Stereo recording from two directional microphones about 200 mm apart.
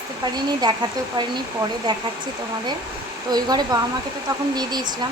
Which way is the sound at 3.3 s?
20° right (ahead or behind).